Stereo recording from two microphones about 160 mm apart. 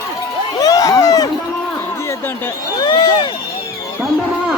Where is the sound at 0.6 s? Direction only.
20° left (ahead or behind).